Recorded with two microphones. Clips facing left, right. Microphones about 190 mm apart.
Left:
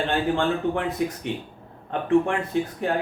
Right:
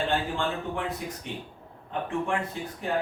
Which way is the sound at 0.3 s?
70° left (ahead or behind).